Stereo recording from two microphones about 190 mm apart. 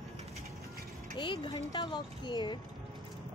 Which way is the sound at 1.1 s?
25° left (ahead or behind).